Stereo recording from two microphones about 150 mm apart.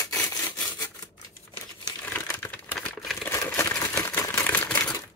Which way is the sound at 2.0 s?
15° left (ahead or behind).